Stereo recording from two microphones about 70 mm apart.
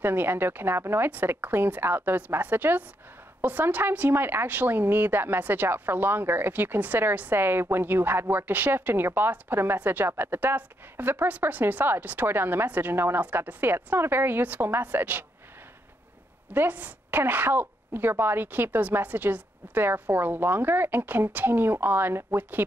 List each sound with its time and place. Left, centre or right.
0.0 s speech: right
16.5 s speech: right